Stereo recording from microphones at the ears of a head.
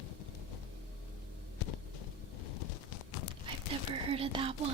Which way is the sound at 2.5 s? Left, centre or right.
Left.